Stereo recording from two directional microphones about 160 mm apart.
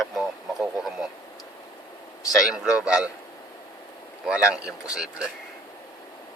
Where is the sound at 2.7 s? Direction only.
5° right (ahead or behind).